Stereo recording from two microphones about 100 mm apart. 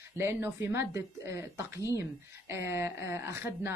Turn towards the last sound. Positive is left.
turn(degrees=-25)  # may be behind; listen again after turning